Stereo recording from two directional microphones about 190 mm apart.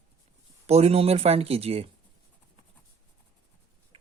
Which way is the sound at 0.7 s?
35° right (ahead or behind).